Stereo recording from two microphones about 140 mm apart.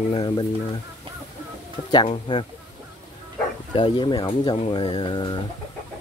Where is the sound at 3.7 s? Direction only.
30° left (ahead or behind).